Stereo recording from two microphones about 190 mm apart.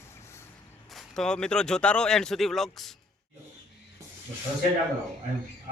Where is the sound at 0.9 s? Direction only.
Centre (ahead or behind).